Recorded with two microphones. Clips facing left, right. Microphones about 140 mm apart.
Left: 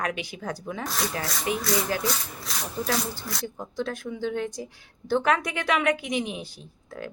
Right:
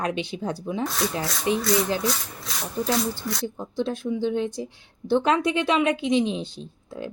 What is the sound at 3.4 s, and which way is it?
A woman's voice, 20° right (ahead or behind).